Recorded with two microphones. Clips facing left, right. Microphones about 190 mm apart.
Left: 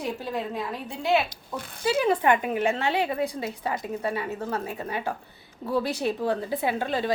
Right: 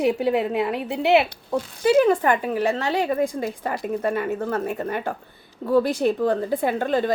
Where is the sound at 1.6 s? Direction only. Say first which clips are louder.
Right 5 dB; 55° left (ahead or behind).